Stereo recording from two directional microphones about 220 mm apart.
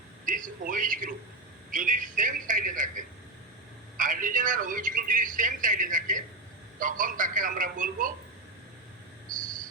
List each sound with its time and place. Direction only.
0.3 s a man's voice: 35° right (ahead or behind)
3.9 s a man's voice: 35° right (ahead or behind)